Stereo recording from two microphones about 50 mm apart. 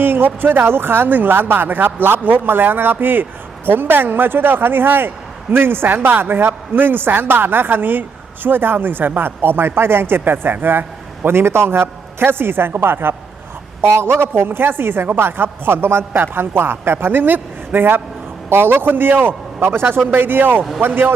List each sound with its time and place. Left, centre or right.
0.0 s speech: right